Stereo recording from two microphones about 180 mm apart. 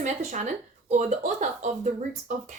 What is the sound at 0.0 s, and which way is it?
Speech, 40° right (ahead or behind).